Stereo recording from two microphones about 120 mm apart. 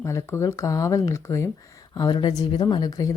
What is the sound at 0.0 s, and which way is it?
A woman's voice, 25° left (ahead or behind).